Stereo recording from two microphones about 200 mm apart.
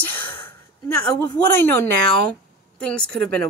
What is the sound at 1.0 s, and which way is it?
Speech, 15° left (ahead or behind).